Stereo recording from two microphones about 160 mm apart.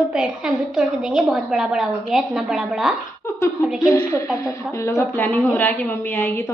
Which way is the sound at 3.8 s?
20° left (ahead or behind).